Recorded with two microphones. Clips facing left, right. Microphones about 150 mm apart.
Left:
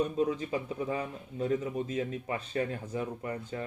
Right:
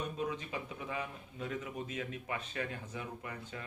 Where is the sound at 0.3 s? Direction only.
35° left (ahead or behind).